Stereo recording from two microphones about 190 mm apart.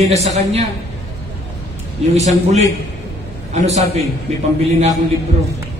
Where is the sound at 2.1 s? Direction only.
35° right (ahead or behind).